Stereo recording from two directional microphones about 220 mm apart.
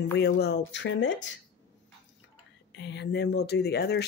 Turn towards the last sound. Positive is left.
turn(degrees=50)  # may be behind; listen again after turning